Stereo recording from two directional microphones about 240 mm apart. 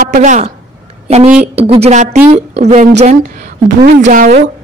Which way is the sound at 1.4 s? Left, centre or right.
Right.